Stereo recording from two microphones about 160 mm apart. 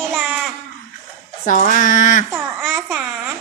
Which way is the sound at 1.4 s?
55° left (ahead or behind).